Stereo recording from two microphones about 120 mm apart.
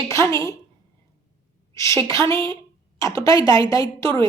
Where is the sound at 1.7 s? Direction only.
25° left (ahead or behind).